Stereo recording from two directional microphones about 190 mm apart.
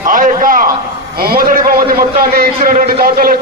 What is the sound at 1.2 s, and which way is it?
A man's voice, 50° right (ahead or behind).